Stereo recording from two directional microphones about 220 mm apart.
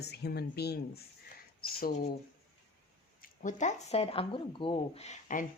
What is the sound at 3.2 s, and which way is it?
Speech, 35° left (ahead or behind).